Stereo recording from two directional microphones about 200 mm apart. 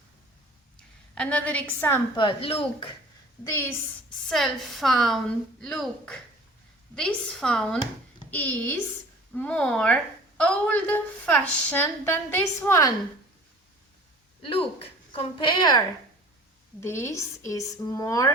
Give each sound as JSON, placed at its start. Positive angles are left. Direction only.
{"t": 0.8, "sound": "a woman's voice", "side_deg": 5}
{"t": 2.1, "sound": "speech", "side_deg": 25}
{"t": 3.4, "sound": "a woman's voice", "side_deg": 15}
{"t": 4.3, "sound": "a woman's voice", "side_deg": 0}
{"t": 14.4, "sound": "a woman's voice", "side_deg": 25}
{"t": 16.8, "sound": "a woman's voice", "side_deg": 15}